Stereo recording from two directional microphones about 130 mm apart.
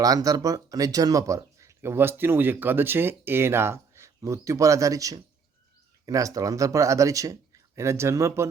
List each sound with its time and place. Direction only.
0.0 s speech: 30° right (ahead or behind)